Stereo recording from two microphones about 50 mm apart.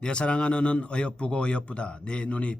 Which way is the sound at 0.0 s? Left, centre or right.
Centre.